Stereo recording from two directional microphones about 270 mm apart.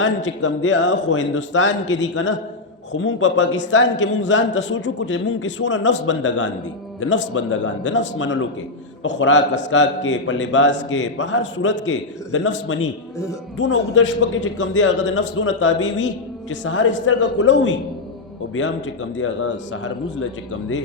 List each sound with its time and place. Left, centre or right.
0.3 s a man's voice: left
19.1 s a man's voice: left